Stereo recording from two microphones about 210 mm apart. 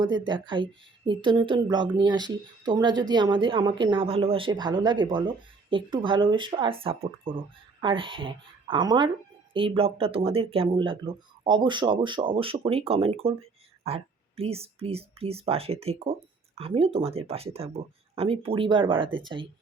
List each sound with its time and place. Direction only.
0.0 s speech: 20° right (ahead or behind)